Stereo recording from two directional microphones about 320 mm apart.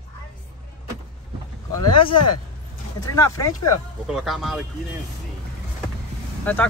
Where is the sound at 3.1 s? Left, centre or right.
Centre.